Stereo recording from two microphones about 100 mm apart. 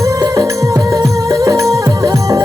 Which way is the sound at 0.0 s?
35° right (ahead or behind).